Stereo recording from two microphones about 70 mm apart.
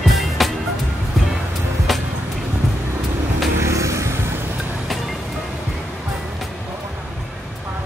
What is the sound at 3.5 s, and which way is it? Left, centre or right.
Vehicle, right.